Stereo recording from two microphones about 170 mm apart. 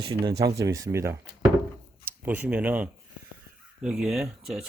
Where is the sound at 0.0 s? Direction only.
25° right (ahead or behind).